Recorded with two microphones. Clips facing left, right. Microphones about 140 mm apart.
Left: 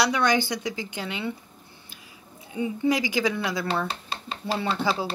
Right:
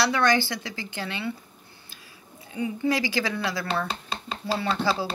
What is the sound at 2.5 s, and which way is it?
A woman's voice, 20° left (ahead or behind).